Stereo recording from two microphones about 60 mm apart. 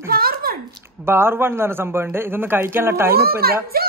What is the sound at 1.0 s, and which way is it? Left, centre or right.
A man's voice, right.